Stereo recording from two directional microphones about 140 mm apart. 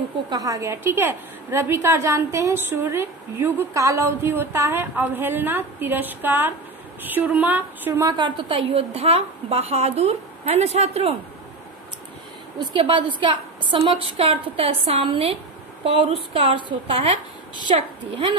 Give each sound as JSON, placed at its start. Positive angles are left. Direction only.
{"t": 0.3, "sound": "a woman's voice", "side_deg": -25}
{"t": 8.0, "sound": "a woman's voice", "side_deg": -35}
{"t": 12.7, "sound": "a woman's voice", "side_deg": -35}